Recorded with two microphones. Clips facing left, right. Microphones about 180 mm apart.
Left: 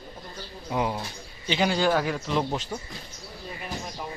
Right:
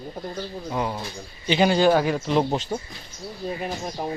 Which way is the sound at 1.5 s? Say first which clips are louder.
Right 5 dB; 25° right (ahead or behind).